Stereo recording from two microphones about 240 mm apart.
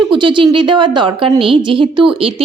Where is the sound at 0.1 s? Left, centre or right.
Centre.